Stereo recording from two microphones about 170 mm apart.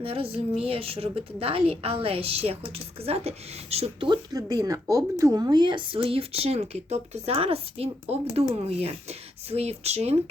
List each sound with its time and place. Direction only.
0.0 s a woman's voice: 35° right (ahead or behind)